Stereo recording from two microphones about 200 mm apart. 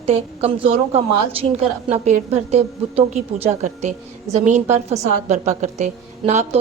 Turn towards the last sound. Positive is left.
turn(degrees=-35)  # may be behind; listen again after turning